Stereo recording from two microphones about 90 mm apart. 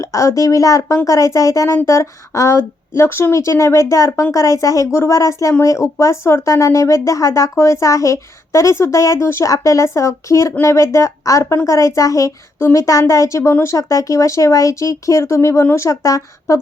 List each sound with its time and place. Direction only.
0.0 s speech: 35° left (ahead or behind)